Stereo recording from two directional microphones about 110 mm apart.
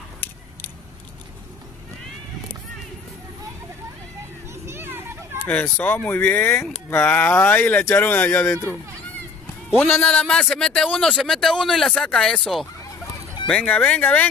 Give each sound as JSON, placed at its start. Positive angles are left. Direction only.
{"t": 4.6, "sound": "children playing", "side_deg": -20}
{"t": 5.4, "sound": "speech", "side_deg": 15}
{"t": 9.8, "sound": "a man's voice", "side_deg": 20}
{"t": 10.0, "sound": "speech", "side_deg": 5}